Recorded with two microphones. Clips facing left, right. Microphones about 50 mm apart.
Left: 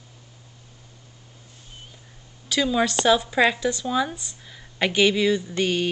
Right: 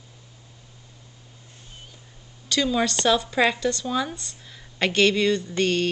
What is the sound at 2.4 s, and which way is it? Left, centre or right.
Speech, centre.